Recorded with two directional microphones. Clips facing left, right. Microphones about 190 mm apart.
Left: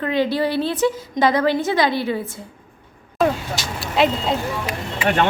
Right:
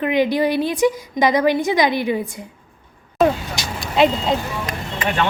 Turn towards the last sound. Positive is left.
turn(degrees=5)  # may be behind; listen again after turning